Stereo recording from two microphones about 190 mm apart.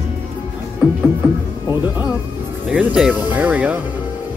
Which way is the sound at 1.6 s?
20° left (ahead or behind).